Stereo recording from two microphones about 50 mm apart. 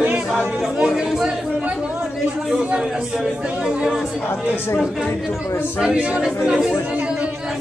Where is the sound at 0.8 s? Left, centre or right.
Centre.